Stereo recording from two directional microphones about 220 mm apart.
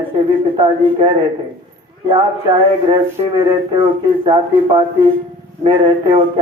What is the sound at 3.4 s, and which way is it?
A man's voice, 25° right (ahead or behind).